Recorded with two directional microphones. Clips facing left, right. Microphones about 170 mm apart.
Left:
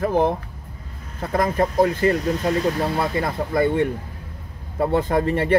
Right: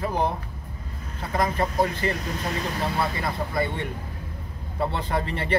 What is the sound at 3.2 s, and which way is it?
Speech, 50° left (ahead or behind).